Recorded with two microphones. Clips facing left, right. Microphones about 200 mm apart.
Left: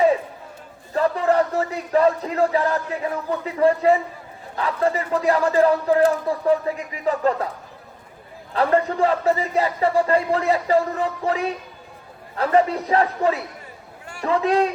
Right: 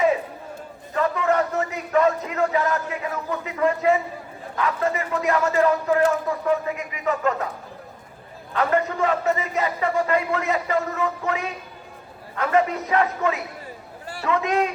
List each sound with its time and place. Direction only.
0.9 s a man's voice: 35° left (ahead or behind)
8.5 s a man's voice: 30° left (ahead or behind)